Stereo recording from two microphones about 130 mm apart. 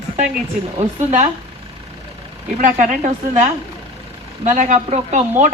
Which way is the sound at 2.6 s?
80° right.